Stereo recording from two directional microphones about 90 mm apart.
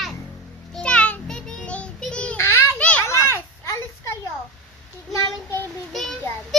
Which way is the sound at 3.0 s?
35° left (ahead or behind).